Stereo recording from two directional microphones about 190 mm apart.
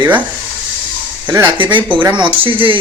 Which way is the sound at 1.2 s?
15° right (ahead or behind).